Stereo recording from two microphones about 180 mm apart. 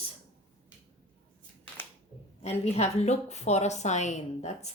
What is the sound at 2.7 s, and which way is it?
A woman's voice, 40° left (ahead or behind).